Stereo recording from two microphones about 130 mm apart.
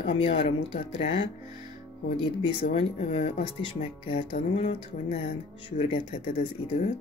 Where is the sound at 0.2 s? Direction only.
50° left (ahead or behind).